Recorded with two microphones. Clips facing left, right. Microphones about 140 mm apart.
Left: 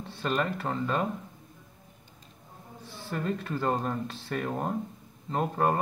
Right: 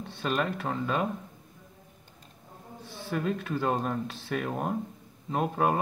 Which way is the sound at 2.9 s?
Centre (ahead or behind).